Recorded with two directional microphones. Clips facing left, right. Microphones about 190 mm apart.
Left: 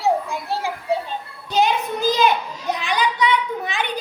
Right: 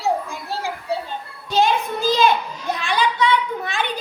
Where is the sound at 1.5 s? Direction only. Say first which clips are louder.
Right 1 dB; 15° left (ahead or behind).